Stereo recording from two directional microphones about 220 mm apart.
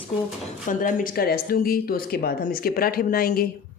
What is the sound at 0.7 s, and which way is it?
Speech, 35° left (ahead or behind).